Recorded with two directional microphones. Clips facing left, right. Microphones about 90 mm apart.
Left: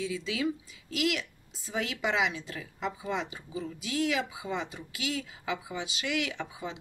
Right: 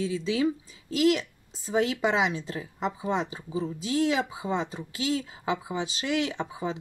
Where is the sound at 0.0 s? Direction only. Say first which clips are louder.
Right 5 dB; 35° right (ahead or behind).